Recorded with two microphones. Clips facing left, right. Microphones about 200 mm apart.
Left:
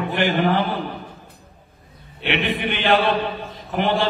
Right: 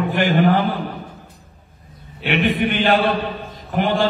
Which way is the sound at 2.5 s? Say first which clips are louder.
Right 2 dB; 45° right (ahead or behind).